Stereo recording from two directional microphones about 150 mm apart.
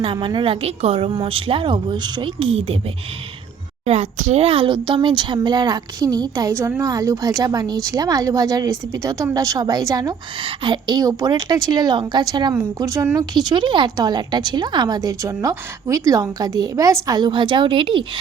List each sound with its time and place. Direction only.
0.0 s a woman's voice: 35° right (ahead or behind)
3.8 s speech: 45° right (ahead or behind)